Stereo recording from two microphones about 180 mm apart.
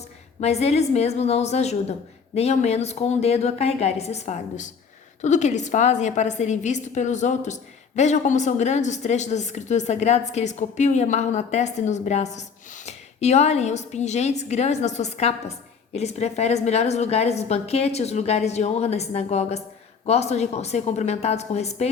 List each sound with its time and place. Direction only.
0.3 s a woman's voice: 35° left (ahead or behind)